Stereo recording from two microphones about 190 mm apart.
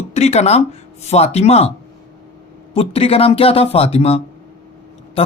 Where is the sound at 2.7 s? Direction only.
30° left (ahead or behind).